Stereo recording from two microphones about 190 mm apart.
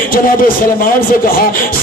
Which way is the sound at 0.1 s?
50° left (ahead or behind).